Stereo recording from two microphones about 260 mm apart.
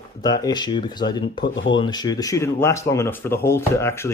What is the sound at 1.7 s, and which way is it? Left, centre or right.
Speech, centre.